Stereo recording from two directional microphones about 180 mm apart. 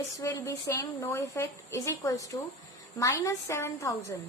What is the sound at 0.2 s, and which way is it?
A woman's voice, 15° left (ahead or behind).